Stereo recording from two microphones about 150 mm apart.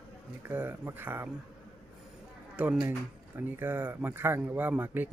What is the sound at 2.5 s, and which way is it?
Speech, 10° right (ahead or behind).